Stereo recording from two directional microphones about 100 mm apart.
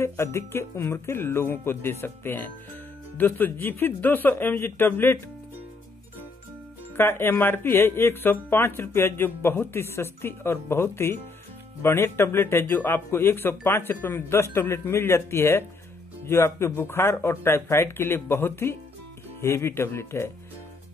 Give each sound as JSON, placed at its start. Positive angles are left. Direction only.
{"t": 0.0, "sound": "speech", "side_deg": 30}
{"t": 7.0, "sound": "speech", "side_deg": 25}